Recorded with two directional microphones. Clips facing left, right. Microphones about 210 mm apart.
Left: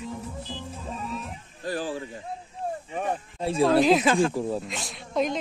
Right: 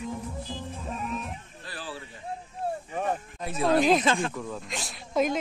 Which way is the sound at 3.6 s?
Centre (ahead or behind).